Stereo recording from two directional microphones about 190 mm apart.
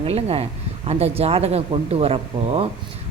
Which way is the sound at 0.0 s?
30° right (ahead or behind).